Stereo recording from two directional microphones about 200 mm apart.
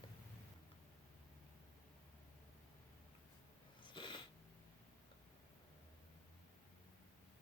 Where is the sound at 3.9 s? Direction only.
25° left (ahead or behind).